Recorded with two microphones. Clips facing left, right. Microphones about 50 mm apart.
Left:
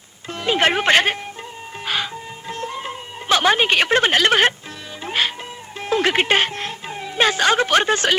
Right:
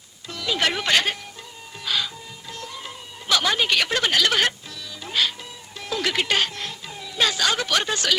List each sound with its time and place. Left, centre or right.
0.3 s speech: left
1.8 s music: left
5.8 s speech: left